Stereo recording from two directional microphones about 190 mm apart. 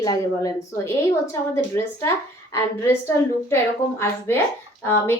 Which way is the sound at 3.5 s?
10° left (ahead or behind).